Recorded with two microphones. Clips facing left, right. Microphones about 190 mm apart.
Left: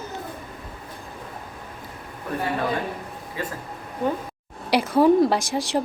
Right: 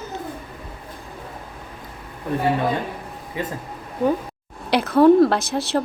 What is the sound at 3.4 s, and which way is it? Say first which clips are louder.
Speech: right 3 dB; 20° right (ahead or behind).